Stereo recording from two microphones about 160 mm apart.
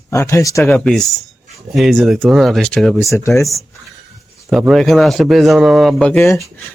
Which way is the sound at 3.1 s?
20° left (ahead or behind).